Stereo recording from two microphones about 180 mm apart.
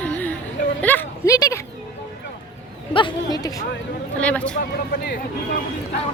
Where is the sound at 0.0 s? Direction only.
10° left (ahead or behind).